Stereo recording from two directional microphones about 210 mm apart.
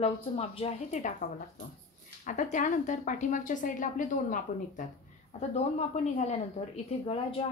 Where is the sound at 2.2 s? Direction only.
35° left (ahead or behind).